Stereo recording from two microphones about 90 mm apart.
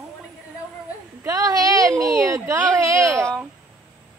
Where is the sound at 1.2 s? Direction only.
40° right (ahead or behind).